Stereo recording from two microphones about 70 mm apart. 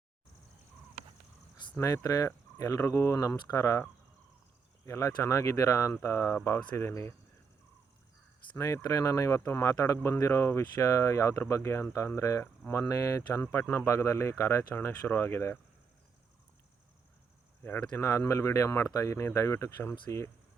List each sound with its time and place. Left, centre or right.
2.0 s speech: left
4.9 s speech: left
8.5 s speech: left
13.3 s speech: left
17.9 s speech: left
19.7 s speech: left
20.1 s speech: left